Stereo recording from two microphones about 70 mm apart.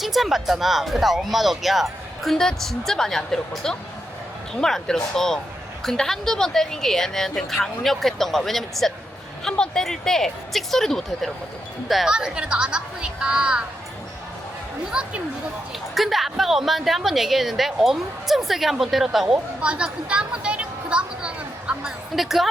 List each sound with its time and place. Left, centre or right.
0.0 s speech: centre
12.1 s speech: centre
14.9 s speech: centre
16.0 s speech: centre
19.6 s speech: centre
22.1 s speech: centre